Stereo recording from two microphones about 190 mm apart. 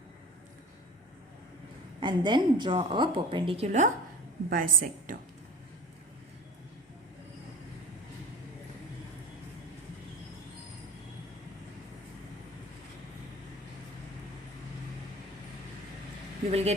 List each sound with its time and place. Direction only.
2.0 s a woman's voice: 25° right (ahead or behind); by 5.1 s 45° right (ahead or behind)
16.5 s speech: 35° right (ahead or behind)